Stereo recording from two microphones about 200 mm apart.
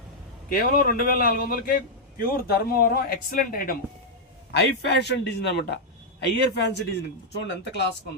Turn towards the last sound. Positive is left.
turn(degrees=60)  # may be behind; listen again after turning